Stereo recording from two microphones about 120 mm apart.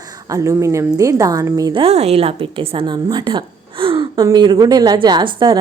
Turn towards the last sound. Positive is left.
turn(degrees=-40)  # may be behind; listen again after turning